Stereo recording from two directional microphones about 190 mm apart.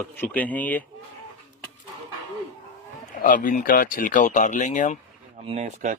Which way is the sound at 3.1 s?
45° left (ahead or behind).